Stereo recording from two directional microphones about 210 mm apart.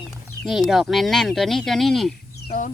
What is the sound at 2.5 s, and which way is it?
Speech, 40° left (ahead or behind).